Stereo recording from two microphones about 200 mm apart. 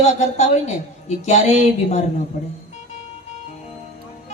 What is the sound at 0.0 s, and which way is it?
Speech, 35° left (ahead or behind).